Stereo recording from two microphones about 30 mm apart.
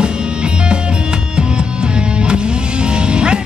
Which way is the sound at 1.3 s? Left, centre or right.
Right.